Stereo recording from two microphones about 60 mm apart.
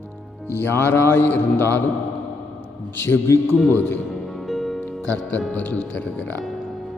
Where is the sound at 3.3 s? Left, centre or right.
Left.